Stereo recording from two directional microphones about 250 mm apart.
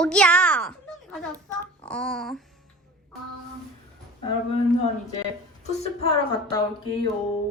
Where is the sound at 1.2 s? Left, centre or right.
Centre.